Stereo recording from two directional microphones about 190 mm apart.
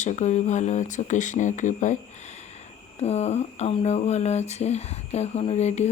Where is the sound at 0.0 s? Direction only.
40° left (ahead or behind).